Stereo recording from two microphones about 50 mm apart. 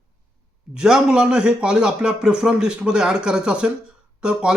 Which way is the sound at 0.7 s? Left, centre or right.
Centre.